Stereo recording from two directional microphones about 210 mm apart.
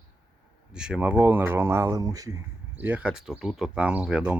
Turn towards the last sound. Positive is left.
turn(degrees=-5)  # may be behind; listen again after turning